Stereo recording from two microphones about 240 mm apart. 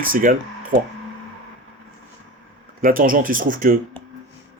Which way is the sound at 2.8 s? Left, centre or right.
Right.